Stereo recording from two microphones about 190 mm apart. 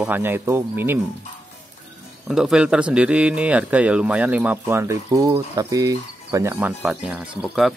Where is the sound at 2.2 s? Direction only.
5° right (ahead or behind).